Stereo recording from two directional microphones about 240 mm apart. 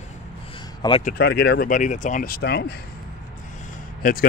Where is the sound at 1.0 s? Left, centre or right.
Left.